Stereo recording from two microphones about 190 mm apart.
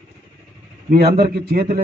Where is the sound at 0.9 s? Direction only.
55° right (ahead or behind).